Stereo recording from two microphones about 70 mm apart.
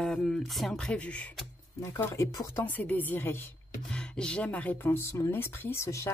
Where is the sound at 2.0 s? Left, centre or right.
Left.